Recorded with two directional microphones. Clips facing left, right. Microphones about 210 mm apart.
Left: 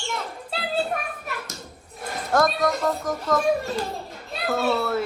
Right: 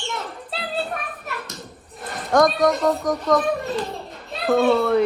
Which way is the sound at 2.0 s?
Centre (ahead or behind).